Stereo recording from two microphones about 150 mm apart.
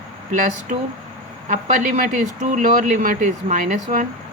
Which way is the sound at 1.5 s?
55° right (ahead or behind).